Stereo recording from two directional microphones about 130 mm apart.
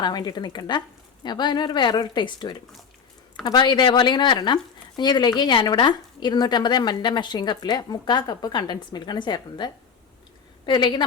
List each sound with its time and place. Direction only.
0.0 s speech: 30° left (ahead or behind)